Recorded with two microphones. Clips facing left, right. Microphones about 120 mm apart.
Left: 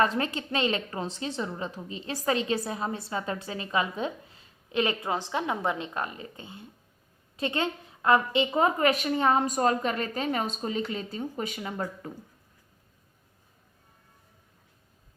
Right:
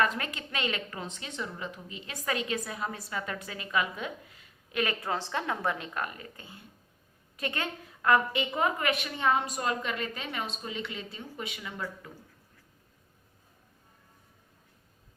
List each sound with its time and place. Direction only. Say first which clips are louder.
0.0 s a woman's voice: left 4 dB; 30° left (ahead or behind)